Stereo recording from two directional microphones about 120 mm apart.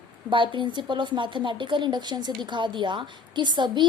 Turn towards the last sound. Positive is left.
turn(degrees=-40)  # may be behind; listen again after turning